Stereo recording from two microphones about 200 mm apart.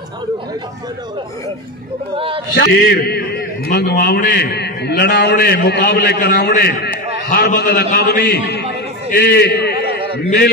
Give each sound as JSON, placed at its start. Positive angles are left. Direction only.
{"t": 2.1, "sound": "a man's voice", "side_deg": -25}
{"t": 2.5, "sound": "a man's voice", "side_deg": 50}
{"t": 9.1, "sound": "a sound", "side_deg": 55}